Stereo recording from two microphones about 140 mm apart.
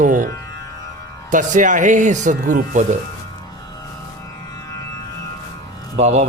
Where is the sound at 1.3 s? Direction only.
65° right (ahead or behind).